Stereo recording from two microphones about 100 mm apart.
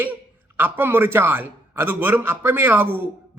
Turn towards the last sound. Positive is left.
turn(degrees=-20)  # may be behind; listen again after turning